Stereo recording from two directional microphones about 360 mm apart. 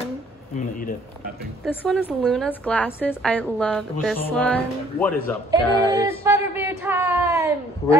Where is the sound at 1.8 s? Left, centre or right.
Centre.